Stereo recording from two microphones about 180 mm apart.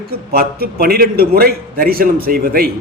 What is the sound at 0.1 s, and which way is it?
A man's voice, 60° right (ahead or behind).